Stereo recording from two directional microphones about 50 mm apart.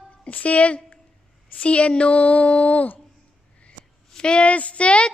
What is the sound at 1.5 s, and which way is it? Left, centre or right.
Speech, left.